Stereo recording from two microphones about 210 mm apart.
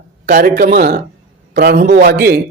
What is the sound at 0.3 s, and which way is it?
Speech, 40° right (ahead or behind).